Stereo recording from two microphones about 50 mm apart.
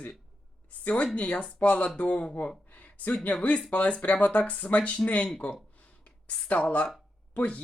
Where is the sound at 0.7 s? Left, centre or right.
Left.